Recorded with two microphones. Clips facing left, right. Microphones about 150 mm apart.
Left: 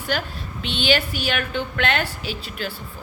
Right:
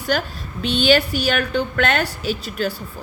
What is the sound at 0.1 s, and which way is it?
A woman's voice, 40° right (ahead or behind).